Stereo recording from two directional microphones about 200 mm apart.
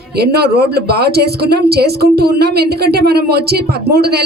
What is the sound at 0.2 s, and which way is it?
Speech, 55° right (ahead or behind).